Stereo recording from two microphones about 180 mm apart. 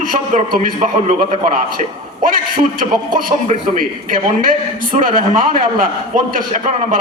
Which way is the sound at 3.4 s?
45° right (ahead or behind).